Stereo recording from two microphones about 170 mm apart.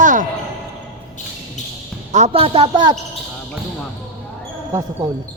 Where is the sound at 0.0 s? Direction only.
50° right (ahead or behind).